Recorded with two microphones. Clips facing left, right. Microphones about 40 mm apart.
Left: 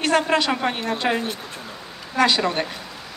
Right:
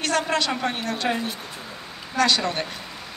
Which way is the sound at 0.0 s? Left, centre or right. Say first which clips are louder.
Left 4 dB; left.